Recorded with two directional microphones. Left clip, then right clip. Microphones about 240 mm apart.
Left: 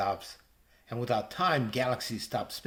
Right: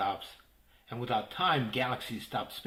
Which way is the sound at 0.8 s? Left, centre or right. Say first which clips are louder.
Left 2 dB; left.